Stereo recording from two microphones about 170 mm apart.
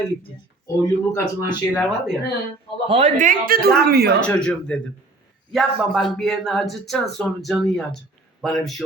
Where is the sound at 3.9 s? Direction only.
70° right (ahead or behind).